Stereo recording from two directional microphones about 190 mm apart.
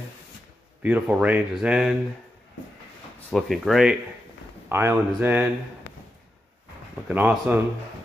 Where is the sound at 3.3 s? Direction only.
Centre (ahead or behind).